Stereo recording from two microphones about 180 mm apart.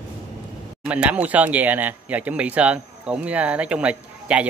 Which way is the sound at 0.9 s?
10° right (ahead or behind).